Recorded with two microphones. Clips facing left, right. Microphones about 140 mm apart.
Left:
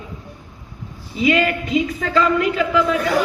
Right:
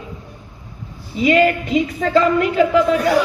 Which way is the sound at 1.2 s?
35° right (ahead or behind).